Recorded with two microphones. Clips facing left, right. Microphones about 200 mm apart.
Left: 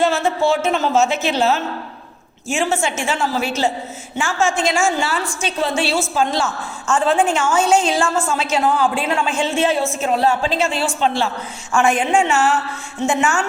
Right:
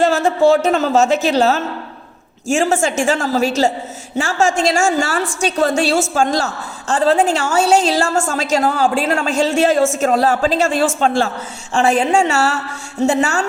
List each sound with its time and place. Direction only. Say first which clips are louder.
0.1 s a woman's voice: right 5 dB; 40° right (ahead or behind)
9.7 s speech: right 6 dB; 90° right
10.0 s a man's voice: right 3 dB; 45° right (ahead or behind)
11.7 s a woman's voice: right 2 dB; 35° right (ahead or behind)